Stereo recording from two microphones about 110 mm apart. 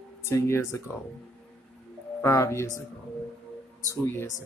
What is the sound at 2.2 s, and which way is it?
Speech, 25° left (ahead or behind).